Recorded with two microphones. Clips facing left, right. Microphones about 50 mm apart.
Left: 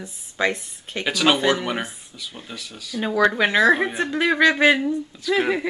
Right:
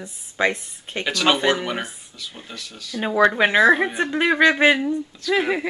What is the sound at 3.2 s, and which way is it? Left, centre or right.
Speech, centre.